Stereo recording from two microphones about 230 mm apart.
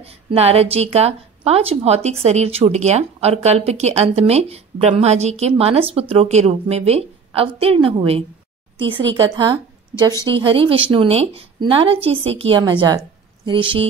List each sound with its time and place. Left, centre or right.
0.0 s a woman's voice: right